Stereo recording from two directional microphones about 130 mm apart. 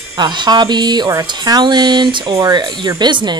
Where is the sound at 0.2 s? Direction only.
35° right (ahead or behind).